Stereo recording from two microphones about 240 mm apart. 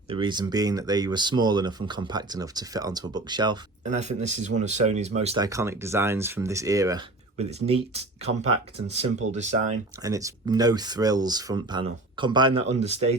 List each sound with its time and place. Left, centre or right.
0.1 s speech: centre
3.8 s speech: right
5.5 s speech: centre
7.3 s speech: right
10.0 s speech: centre